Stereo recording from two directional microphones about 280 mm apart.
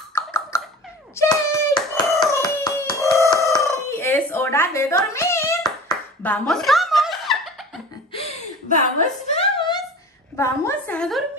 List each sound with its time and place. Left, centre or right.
0.1 s a sound: centre
1.7 s hands: centre
3.3 s fowl: centre
8.1 s chuckle: left
9.0 s a sound: left
10.3 s a woman's voice: centre